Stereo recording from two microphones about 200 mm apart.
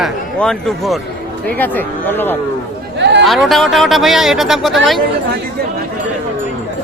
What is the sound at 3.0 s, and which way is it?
Chatter, 60° right (ahead or behind).